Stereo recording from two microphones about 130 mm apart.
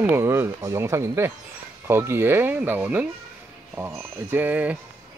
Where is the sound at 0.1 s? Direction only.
20° right (ahead or behind).